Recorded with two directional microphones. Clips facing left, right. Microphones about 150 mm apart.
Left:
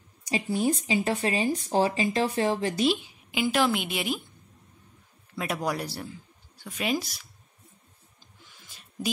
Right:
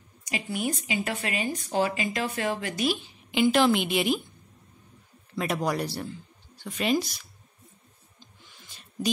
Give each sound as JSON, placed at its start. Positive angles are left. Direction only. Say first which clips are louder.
{"t": 0.2, "sound": "speech", "louder": "left 4 dB", "side_deg": 30}
{"t": 3.0, "sound": "a woman's voice", "louder": "right 5 dB", "side_deg": 5}
{"t": 5.3, "sound": "a woman's voice", "louder": "right 2 dB", "side_deg": 5}